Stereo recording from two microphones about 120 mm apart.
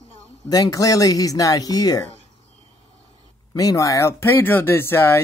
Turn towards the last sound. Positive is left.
turn(degrees=20)  # may be behind; listen again after turning